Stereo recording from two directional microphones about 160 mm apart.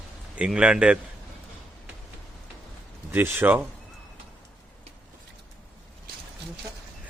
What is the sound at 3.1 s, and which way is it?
Speech, 15° right (ahead or behind).